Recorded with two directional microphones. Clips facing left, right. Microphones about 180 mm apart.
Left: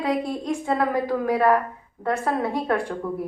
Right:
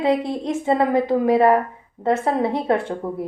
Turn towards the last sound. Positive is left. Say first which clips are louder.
# right 2 dB
turn(degrees=-25)  # may be behind; listen again after turning